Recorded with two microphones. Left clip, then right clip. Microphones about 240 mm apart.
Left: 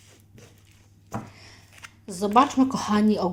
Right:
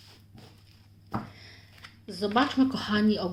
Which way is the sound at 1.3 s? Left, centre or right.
Left.